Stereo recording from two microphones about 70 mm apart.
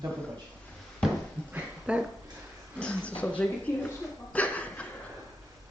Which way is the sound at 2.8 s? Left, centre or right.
Centre.